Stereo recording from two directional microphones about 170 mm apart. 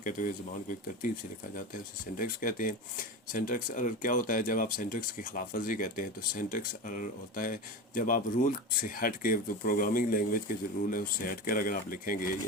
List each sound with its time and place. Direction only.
0.0 s speech: 50° left (ahead or behind)